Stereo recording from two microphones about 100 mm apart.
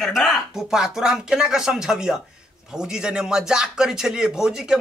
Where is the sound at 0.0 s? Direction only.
Centre (ahead or behind).